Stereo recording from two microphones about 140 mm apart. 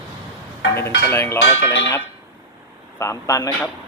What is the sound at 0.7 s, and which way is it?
Speech, 15° left (ahead or behind).